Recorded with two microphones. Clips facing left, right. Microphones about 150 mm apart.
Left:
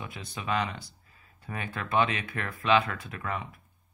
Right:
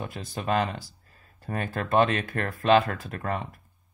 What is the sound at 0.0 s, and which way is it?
Speech, 45° right (ahead or behind).